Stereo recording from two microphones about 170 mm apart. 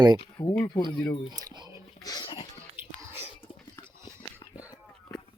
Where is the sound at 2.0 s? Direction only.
25° left (ahead or behind).